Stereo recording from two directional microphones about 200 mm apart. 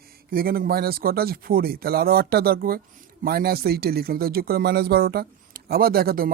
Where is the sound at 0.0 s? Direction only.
50° right (ahead or behind).